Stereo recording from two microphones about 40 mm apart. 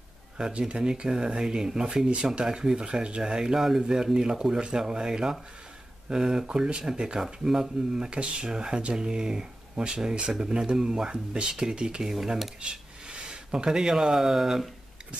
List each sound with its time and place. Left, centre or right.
0.4 s speech: right
8.0 s speech: right
12.0 s speech: centre
12.6 s speech: right